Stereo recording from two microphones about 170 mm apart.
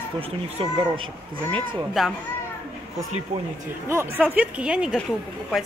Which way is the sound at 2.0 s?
Centre (ahead or behind).